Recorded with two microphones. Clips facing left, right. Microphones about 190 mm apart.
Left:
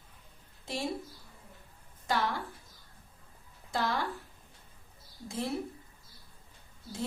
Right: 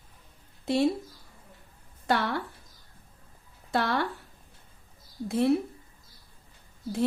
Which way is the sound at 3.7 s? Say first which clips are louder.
Right 5 dB; 65° right (ahead or behind).